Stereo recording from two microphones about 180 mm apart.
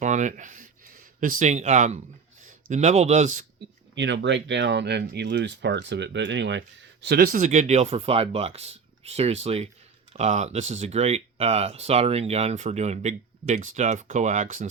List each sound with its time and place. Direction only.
0.0 s a sound: 40° right (ahead or behind)
1.2 s speech: 45° right (ahead or behind)
3.9 s speech: 85° right; by 14.7 s 45° right (ahead or behind)